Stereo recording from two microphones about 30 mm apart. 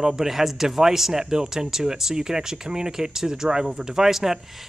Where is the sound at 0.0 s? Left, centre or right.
Centre.